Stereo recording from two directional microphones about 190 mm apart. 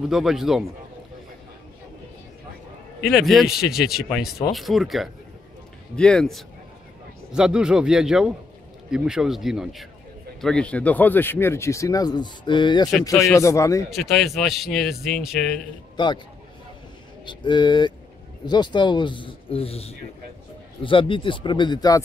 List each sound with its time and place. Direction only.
0.1 s speech: centre (ahead or behind)
3.0 s speech: centre (ahead or behind); by 13.8 s 15° left (ahead or behind)
13.8 s speech: centre (ahead or behind)
16.0 s speech: 25° left (ahead or behind)
17.3 s speech: 25° left (ahead or behind)